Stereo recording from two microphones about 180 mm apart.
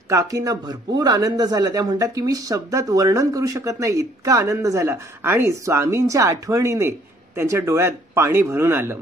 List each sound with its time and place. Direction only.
0.1 s speech: 15° right (ahead or behind)